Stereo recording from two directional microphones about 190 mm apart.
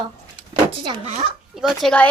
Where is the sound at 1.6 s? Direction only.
Centre (ahead or behind).